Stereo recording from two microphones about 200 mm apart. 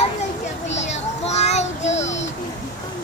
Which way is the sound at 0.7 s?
35° left (ahead or behind).